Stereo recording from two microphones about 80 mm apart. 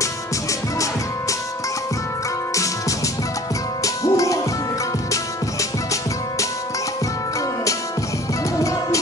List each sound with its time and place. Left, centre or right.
3.8 s music: left